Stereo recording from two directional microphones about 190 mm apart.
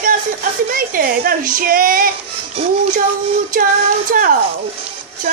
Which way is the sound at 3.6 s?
50° right (ahead or behind).